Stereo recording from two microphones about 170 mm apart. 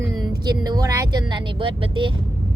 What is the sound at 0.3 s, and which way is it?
Speech, 25° right (ahead or behind).